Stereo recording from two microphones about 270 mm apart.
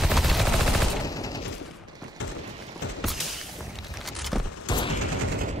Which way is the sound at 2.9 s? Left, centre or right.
Centre.